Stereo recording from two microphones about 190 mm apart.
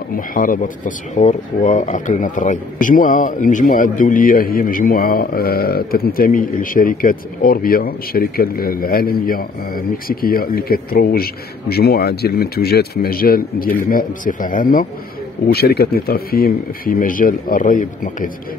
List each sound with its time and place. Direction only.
0.1 s speech: 45° left (ahead or behind)